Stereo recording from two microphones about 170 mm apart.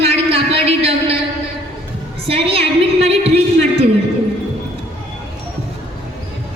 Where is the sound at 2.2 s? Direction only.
35° right (ahead or behind).